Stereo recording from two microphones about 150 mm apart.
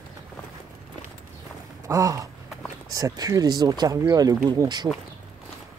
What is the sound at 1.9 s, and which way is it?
Speech, 20° right (ahead or behind).